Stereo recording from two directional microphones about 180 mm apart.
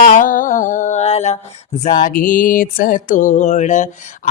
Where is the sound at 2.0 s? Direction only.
50° left (ahead or behind).